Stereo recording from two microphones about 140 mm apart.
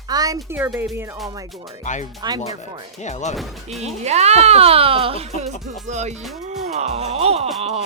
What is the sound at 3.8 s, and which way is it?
Speech, 50° right (ahead or behind).